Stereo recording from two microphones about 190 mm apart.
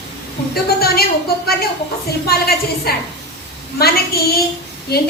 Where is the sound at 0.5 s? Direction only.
55° left (ahead or behind).